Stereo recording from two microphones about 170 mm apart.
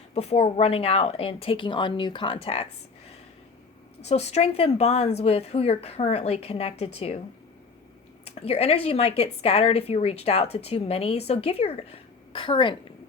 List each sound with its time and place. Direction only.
0.1 s speech: 40° left (ahead or behind)
4.0 s speech: 40° left (ahead or behind)
8.2 s speech: 35° left (ahead or behind)